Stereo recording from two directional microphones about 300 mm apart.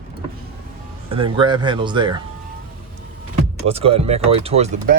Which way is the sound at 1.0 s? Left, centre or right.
Centre.